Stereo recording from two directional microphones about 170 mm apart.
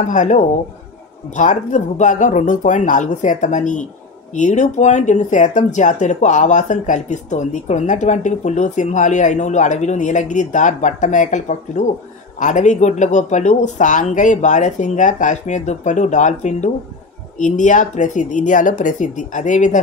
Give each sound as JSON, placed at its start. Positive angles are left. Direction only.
{"t": 0.0, "sound": "speech", "side_deg": 45}